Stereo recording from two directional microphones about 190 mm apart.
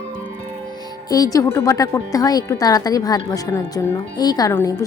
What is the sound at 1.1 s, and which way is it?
Speech, 20° left (ahead or behind).